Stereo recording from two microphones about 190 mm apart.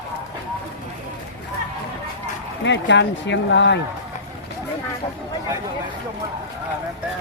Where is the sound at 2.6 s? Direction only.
70° left (ahead or behind).